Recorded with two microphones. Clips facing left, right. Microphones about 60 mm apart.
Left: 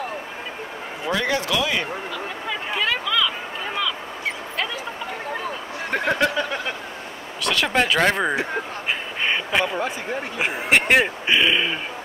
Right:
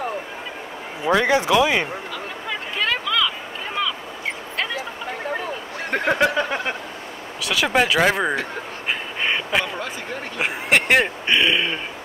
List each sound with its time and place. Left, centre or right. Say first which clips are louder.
1.0 s speech: right 5 dB; right
2.8 s hubbub: right 1 dB; centre
5.9 s a sound: right 1 dB; centre
6.1 s speech: right 2 dB; centre
7.4 s speech: right 1 dB; centre
9.2 s a sound: left 1 dB; centre
10.3 s speech: even; centre